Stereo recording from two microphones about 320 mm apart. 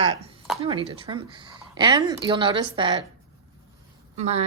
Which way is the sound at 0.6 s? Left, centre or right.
Centre.